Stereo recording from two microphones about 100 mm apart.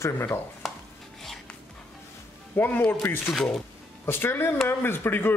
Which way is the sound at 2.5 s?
20° left (ahead or behind).